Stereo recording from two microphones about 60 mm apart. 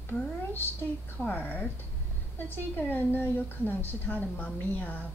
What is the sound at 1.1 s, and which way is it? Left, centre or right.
A woman's voice, left.